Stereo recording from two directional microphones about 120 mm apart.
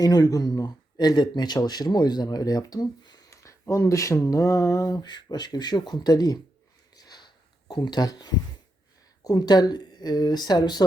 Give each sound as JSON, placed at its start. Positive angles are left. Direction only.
{"t": 0.0, "sound": "speech", "side_deg": 30}
{"t": 6.9, "sound": "sniff", "side_deg": 35}
{"t": 7.7, "sound": "speech", "side_deg": 35}